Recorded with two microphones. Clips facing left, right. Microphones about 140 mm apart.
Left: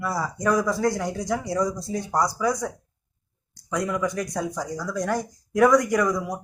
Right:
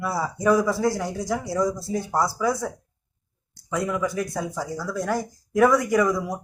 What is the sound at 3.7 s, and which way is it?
Speech, 5° right (ahead or behind).